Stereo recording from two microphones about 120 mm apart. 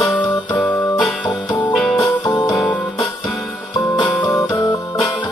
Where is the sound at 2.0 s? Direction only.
40° left (ahead or behind).